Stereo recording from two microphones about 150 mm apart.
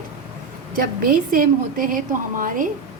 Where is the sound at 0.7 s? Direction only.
70° right (ahead or behind).